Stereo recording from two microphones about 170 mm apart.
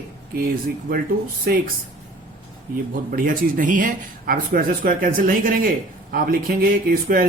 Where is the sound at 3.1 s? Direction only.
55° right (ahead or behind).